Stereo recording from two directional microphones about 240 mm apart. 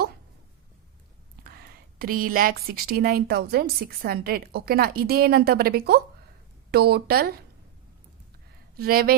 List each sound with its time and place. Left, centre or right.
1.5 s a woman's voice: right
8.7 s speech: right